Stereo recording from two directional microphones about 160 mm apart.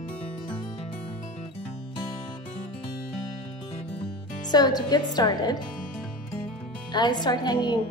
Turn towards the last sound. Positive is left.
turn(degrees=25)  # may be behind; listen again after turning